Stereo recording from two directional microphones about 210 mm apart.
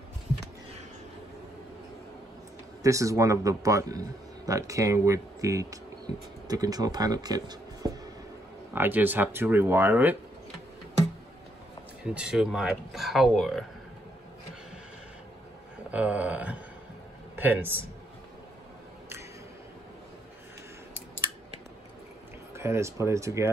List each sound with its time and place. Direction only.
2.8 s speech: 15° right (ahead or behind)
12.0 s speech: 5° right (ahead or behind)
15.9 s speech: 5° right (ahead or behind)
22.6 s speech: 15° right (ahead or behind)